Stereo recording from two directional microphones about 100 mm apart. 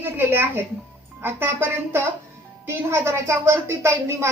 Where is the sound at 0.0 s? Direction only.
20° right (ahead or behind).